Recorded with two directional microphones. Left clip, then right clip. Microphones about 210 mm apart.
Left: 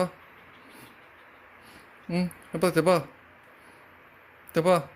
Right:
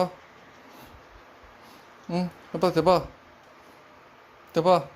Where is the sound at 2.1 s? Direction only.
10° left (ahead or behind).